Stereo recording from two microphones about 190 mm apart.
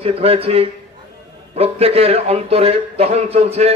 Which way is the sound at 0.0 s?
30° right (ahead or behind).